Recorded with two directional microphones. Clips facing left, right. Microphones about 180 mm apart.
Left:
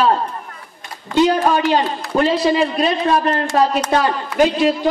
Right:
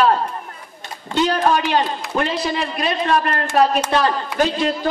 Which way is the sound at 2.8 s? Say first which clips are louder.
Left 3 dB; 25° left (ahead or behind).